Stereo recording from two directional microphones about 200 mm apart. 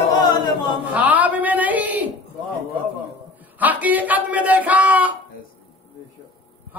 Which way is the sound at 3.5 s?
10° right (ahead or behind).